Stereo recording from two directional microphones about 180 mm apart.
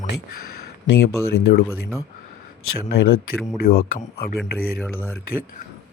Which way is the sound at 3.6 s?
55° left (ahead or behind).